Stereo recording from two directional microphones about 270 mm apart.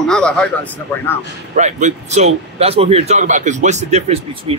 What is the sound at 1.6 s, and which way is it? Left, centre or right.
A man's voice, right.